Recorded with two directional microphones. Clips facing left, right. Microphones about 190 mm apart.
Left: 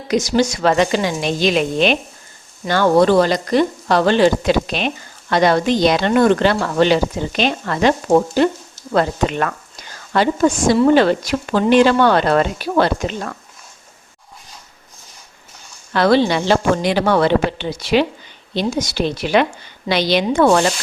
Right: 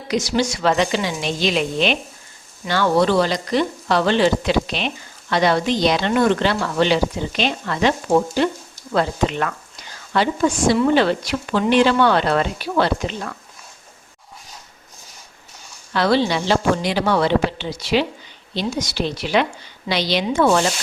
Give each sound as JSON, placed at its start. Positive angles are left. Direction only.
{"t": 0.1, "sound": "speech", "side_deg": 45}
{"t": 15.9, "sound": "speech", "side_deg": 50}